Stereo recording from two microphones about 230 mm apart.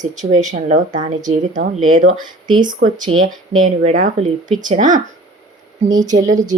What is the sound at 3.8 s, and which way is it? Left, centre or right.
Speech, right.